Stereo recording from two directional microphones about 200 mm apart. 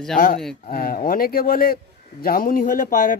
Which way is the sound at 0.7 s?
45° left (ahead or behind).